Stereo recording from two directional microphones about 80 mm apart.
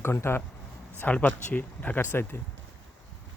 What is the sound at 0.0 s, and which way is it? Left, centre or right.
Speech, left.